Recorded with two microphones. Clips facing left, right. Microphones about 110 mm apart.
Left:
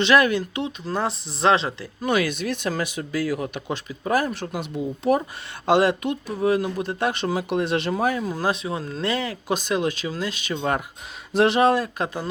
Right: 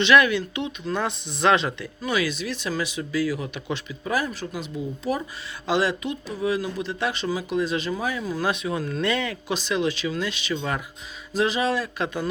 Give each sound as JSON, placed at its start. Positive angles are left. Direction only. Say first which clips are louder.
{"t": 0.0, "sound": "speech", "louder": "even", "side_deg": 40}
{"t": 2.0, "sound": "speech", "louder": "left 3 dB", "side_deg": 55}
{"t": 8.3, "sound": "speech", "louder": "left 1 dB", "side_deg": 35}
{"t": 9.6, "sound": "speech", "louder": "right 2 dB", "side_deg": 45}
{"t": 11.3, "sound": "speech", "louder": "left 5 dB", "side_deg": 65}